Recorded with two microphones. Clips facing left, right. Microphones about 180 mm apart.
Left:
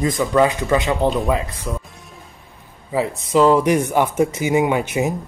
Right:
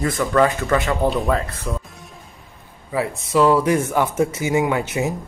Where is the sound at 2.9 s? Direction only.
20° left (ahead or behind).